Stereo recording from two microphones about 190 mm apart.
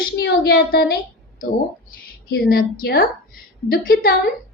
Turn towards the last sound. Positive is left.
turn(degrees=50)  # may be behind; listen again after turning